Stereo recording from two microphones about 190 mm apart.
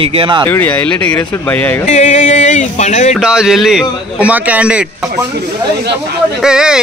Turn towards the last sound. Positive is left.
turn(degrees=-5)  # may be behind; listen again after turning